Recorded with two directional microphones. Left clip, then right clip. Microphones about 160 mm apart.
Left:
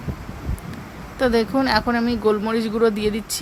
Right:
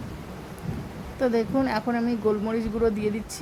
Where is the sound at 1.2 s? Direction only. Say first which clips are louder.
Left 5 dB; 10° left (ahead or behind).